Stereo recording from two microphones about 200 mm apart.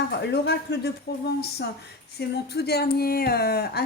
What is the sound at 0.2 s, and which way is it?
A woman's voice, 55° left (ahead or behind).